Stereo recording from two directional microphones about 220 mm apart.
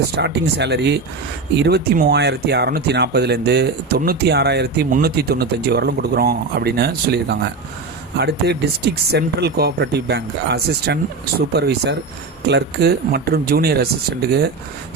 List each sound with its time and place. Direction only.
0.2 s speech: 50° right (ahead or behind)